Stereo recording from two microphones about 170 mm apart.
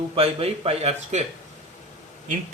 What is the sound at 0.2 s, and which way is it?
A man's voice, 35° right (ahead or behind).